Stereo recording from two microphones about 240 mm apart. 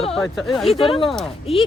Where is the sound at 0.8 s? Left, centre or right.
Left.